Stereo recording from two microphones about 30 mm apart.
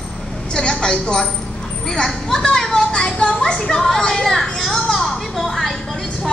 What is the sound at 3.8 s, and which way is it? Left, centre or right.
Speech, centre.